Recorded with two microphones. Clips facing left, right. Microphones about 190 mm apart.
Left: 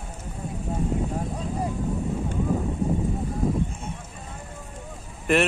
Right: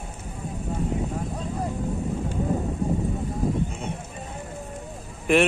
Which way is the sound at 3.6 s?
70° right (ahead or behind).